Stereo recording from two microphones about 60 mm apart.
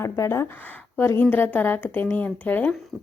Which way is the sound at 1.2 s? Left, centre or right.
Left.